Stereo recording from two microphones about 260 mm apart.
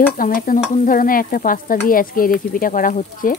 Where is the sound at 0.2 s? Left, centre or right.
Left.